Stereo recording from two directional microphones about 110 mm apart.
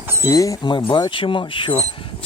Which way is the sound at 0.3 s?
30° left (ahead or behind).